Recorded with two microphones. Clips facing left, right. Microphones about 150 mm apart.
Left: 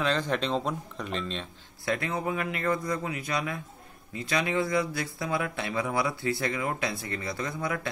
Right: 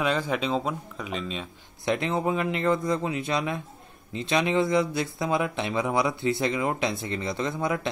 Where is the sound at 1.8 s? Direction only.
25° right (ahead or behind).